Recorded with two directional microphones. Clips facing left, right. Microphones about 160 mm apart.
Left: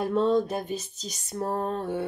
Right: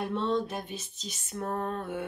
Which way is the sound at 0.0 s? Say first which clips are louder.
Left 6 dB; 40° left (ahead or behind).